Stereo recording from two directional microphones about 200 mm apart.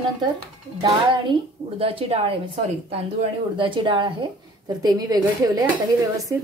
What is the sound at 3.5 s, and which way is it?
A woman's voice, 25° right (ahead or behind).